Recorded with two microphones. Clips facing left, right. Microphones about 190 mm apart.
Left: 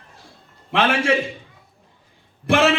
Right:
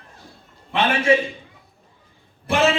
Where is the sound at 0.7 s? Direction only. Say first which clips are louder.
Left 1 dB; 90° left.